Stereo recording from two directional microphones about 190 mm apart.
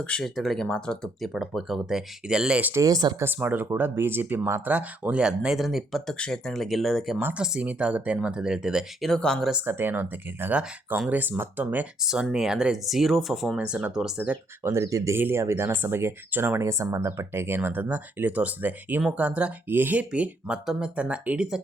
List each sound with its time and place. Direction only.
0.0 s speech: 5° left (ahead or behind); by 3.2 s 20° right (ahead or behind)
3.2 s speech: 10° right (ahead or behind)